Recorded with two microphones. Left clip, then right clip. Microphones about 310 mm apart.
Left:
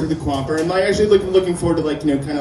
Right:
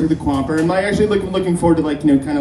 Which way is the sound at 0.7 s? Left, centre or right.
Centre.